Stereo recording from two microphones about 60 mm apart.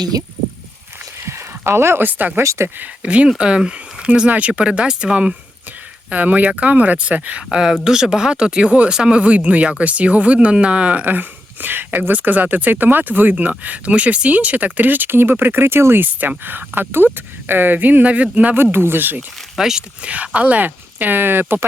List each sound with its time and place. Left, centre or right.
1.2 s a sound: right
2.0 s speech: right
2.4 s speech: right
2.7 s speech: right
18.5 s speech: right
19.5 s speech: centre
20.0 s speech: right